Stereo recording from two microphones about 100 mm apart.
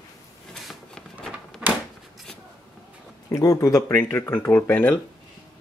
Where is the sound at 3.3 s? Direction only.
35° left (ahead or behind); by 5.0 s 20° left (ahead or behind).